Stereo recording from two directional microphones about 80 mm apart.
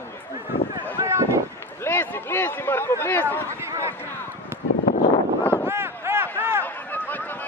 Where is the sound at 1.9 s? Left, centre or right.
Left.